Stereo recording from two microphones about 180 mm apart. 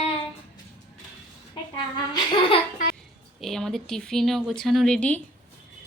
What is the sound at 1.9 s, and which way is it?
Speech, 25° left (ahead or behind).